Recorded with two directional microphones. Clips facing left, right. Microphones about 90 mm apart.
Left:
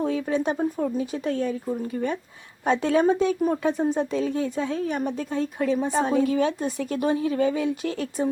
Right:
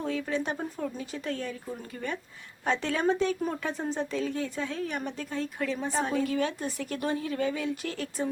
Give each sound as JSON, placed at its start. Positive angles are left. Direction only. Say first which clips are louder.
{"t": 0.0, "sound": "a woman's voice", "louder": "left 6 dB", "side_deg": 20}
{"t": 2.6, "sound": "a woman's voice", "louder": "left 7 dB", "side_deg": 20}